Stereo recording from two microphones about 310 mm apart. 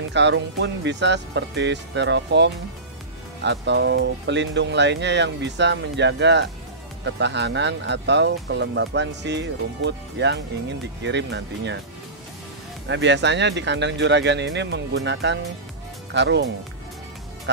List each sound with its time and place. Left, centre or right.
0.1 s speech: right
12.8 s speech: right